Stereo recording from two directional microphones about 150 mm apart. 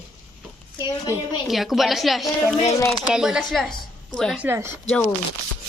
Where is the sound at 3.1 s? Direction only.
5° right (ahead or behind).